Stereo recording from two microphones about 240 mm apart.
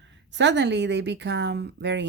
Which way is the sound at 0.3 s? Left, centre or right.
Right.